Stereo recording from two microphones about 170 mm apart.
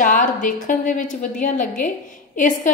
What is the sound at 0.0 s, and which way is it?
A woman's voice, 50° left (ahead or behind).